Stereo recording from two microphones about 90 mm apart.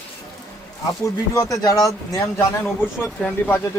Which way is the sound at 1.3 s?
35° left (ahead or behind).